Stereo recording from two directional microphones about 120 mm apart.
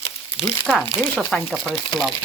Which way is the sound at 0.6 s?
5° left (ahead or behind).